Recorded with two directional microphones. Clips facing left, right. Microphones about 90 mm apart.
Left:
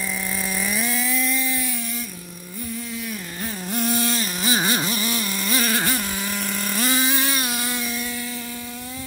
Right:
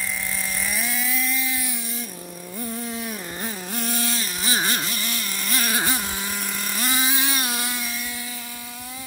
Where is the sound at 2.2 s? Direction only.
60° right (ahead or behind).